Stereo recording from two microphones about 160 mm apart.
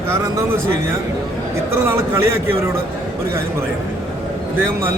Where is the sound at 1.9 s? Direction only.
15° right (ahead or behind).